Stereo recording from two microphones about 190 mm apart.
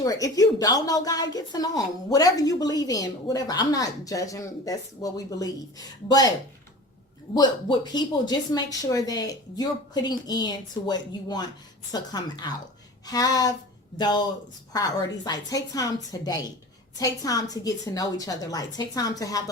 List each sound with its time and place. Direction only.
0.0 s speech: 20° left (ahead or behind)
7.3 s speech: 20° left (ahead or behind)